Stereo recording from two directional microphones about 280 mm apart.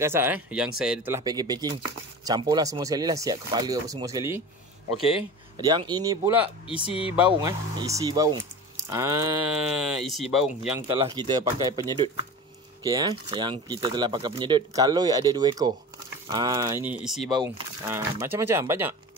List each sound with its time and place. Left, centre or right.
0.0 s speech: centre
5.6 s speech: centre
6.9 s speech: centre
7.2 s speech: centre
11.0 s speech: centre
17.3 s speech: centre